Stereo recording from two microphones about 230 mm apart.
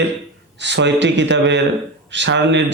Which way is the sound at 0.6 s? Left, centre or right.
Right.